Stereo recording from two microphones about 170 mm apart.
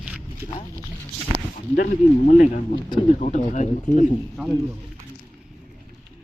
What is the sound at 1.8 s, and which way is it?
Speech, 45° left (ahead or behind).